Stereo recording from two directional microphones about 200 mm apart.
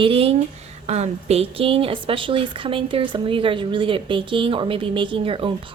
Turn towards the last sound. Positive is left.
turn(degrees=-25)  # may be behind; listen again after turning